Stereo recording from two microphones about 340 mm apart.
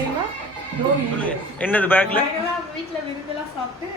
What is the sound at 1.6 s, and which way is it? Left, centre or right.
Speech, centre.